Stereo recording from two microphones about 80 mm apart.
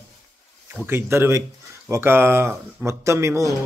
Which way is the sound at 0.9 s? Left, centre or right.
Right.